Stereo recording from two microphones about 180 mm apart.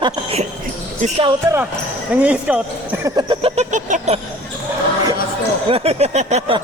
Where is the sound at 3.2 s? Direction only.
30° right (ahead or behind).